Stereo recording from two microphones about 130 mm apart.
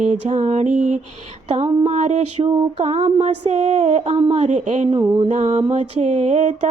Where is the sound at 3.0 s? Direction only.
60° right (ahead or behind).